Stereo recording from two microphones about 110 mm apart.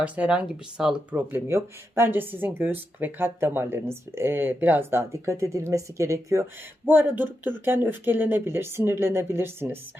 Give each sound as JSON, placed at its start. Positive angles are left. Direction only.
{"t": 0.0, "sound": "speech", "side_deg": -10}
{"t": 1.1, "sound": "speech", "side_deg": -20}
{"t": 6.8, "sound": "speech", "side_deg": -15}